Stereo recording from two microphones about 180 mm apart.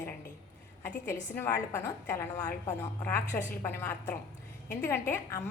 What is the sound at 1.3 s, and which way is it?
A woman's voice, 10° left (ahead or behind).